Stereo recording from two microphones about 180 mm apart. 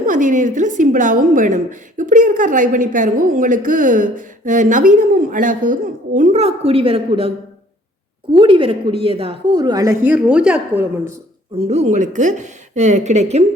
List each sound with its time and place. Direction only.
0.0 s a woman's voice: 45° right (ahead or behind); by 11.1 s 10° right (ahead or behind)
11.6 s a woman's voice: 35° right (ahead or behind)